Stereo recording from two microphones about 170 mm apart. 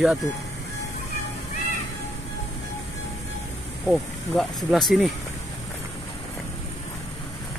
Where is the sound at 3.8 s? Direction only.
Centre (ahead or behind).